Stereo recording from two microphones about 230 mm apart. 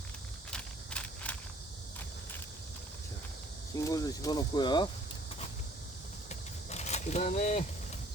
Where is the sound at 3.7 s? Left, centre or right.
Centre.